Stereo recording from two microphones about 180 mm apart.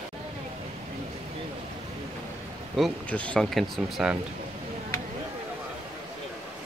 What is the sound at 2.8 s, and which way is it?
Speech, 5° left (ahead or behind).